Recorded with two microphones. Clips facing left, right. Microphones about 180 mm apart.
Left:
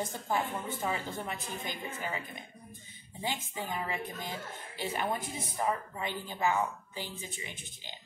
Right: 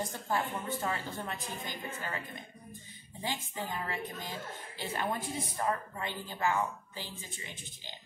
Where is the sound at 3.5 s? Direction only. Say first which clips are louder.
Left 1 dB; 10° left (ahead or behind).